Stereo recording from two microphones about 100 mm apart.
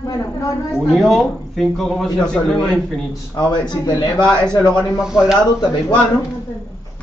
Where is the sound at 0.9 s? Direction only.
Centre (ahead or behind).